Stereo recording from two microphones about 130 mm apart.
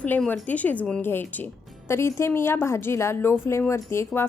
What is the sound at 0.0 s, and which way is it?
A woman's voice, 10° left (ahead or behind).